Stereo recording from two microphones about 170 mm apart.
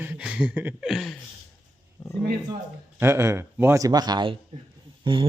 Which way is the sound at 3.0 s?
15° right (ahead or behind).